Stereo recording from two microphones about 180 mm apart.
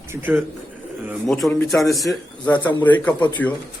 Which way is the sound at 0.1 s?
10° right (ahead or behind).